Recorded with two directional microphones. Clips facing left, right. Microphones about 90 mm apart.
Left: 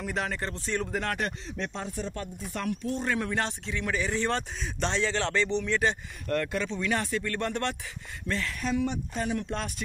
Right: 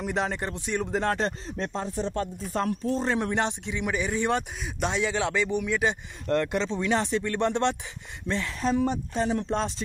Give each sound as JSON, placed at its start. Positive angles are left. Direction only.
{"t": 0.0, "sound": "speech", "side_deg": -20}
{"t": 6.2, "sound": "speech", "side_deg": -25}
{"t": 8.6, "sound": "speech", "side_deg": -35}